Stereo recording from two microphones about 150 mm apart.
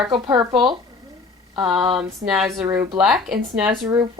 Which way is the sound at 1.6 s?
35° right (ahead or behind).